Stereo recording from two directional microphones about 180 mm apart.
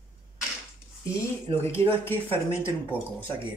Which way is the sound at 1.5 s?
15° left (ahead or behind).